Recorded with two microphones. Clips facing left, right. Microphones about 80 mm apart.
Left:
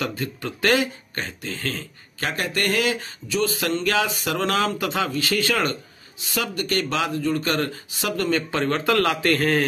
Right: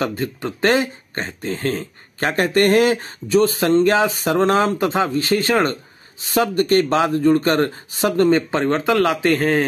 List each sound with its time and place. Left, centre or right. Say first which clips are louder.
0.0 s speech: right 5 dB; right